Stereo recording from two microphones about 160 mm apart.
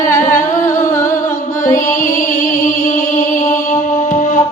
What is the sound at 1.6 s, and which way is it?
Music, 55° left (ahead or behind).